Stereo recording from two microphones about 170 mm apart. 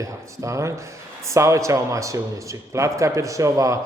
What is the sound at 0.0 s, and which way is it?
A man's voice, 15° right (ahead or behind).